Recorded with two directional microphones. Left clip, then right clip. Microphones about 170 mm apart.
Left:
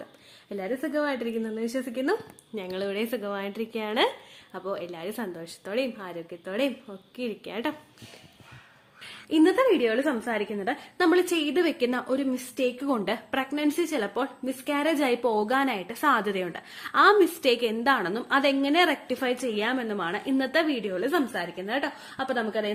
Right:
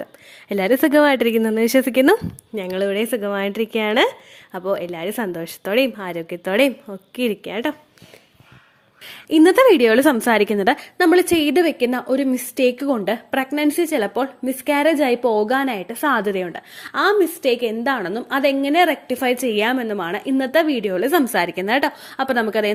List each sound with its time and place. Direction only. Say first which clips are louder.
0.4 s speech: right 14 dB; 65° right (ahead or behind)
2.6 s a woman's voice: right 9 dB; 45° right (ahead or behind)
7.5 s speech: right 7 dB; 40° right (ahead or behind)
9.0 s a woman's voice: right 8 dB; 50° right (ahead or behind); by 10.8 s 70° right (ahead or behind)
10.9 s a woman's voice: right 6 dB; 40° right (ahead or behind)
11.6 s speech: right 7 dB; 30° right (ahead or behind)
12.9 s speech: right 7 dB; 30° right (ahead or behind); by 22.7 s 55° right (ahead or behind)